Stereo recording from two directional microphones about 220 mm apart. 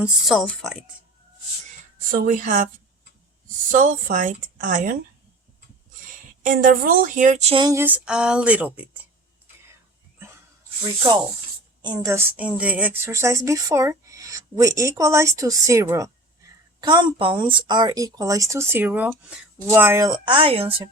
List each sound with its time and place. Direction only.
0.0 s speech: centre (ahead or behind)
2.1 s speech: 35° right (ahead or behind)
3.7 s speech: 35° right (ahead or behind)
6.4 s speech: 40° right (ahead or behind); by 8.8 s 5° right (ahead or behind)
11.8 s speech: 15° right (ahead or behind)